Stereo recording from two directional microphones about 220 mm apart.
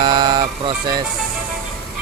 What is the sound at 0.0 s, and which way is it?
Music, 20° right (ahead or behind).